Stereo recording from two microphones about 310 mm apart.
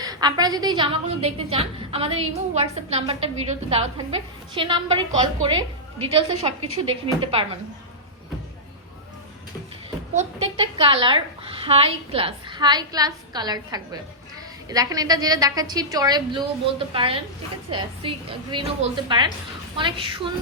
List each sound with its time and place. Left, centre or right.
0.0 s a woman's voice: centre
10.2 s a woman's voice: centre